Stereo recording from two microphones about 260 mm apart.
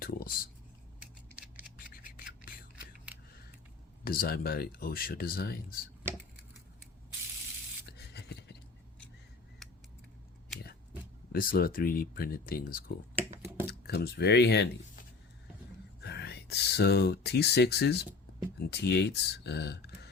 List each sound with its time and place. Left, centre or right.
0.0 s a sound: left
1.4 s scissors: centre
3.1 s scissors: centre
4.0 s speech: left
7.9 s a sound: left
11.3 s speech: left
16.0 s speech: left